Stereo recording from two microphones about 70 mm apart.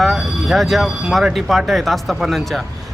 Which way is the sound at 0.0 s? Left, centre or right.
Centre.